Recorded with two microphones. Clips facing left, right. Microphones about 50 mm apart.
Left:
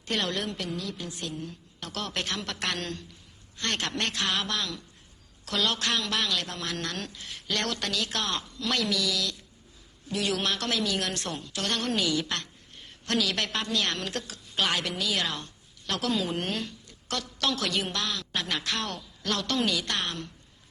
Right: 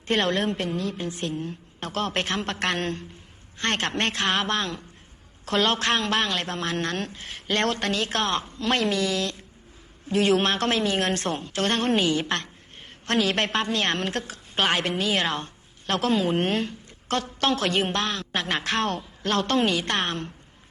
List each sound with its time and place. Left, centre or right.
0.1 s a woman's voice: right